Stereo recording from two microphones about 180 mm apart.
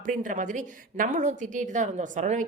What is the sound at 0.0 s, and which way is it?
A woman's voice, 45° right (ahead or behind).